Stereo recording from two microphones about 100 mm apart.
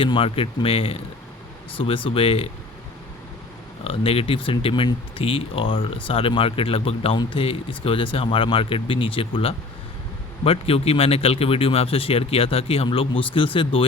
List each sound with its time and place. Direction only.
0.0 s a man's voice: 65° left (ahead or behind)
3.8 s a man's voice: 70° left (ahead or behind)